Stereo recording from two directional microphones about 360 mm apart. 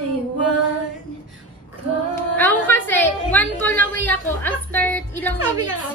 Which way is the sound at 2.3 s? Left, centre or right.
Centre.